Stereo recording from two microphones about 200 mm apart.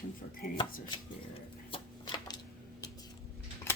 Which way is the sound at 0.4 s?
45° left (ahead or behind).